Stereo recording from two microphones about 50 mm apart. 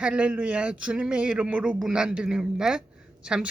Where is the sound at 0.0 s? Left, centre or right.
Right.